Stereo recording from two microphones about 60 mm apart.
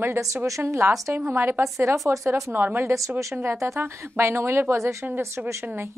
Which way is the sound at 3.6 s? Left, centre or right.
Right.